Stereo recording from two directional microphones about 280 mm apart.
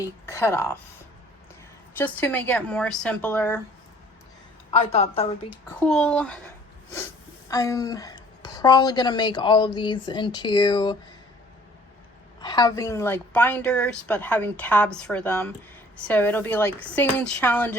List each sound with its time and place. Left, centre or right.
0.0 s a woman's voice: centre
2.0 s a woman's voice: centre
4.7 s a woman's voice: left
5.6 s a woman's voice: centre
12.4 s a woman's voice: centre